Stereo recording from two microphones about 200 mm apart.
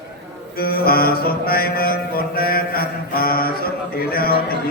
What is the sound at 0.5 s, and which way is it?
Music, 50° left (ahead or behind).